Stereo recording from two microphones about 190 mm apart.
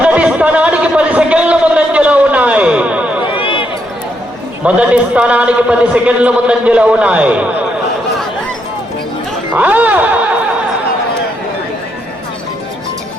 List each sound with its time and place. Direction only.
0.0 s a sound: 5° right (ahead or behind)
3.4 s run: 25° left (ahead or behind)
4.6 s a man's voice: 5° right (ahead or behind)
9.6 s a man's voice: 10° right (ahead or behind)